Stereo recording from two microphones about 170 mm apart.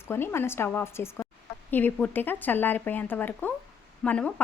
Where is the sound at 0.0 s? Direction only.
15° left (ahead or behind).